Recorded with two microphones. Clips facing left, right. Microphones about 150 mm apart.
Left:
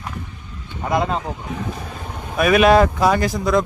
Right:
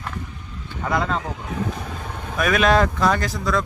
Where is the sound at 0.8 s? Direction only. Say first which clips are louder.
Left 3 dB; 20° left (ahead or behind).